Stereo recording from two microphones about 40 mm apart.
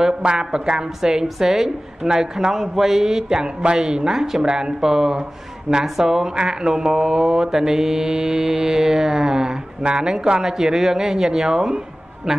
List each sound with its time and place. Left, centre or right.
0.2 s mantra: right